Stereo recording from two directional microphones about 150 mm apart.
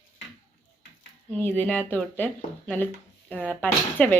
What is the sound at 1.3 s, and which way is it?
A woman's voice, 10° left (ahead or behind).